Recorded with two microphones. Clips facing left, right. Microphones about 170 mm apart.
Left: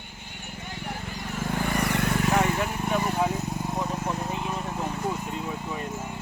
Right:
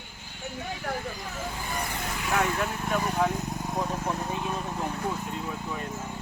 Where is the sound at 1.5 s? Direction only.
70° left (ahead or behind).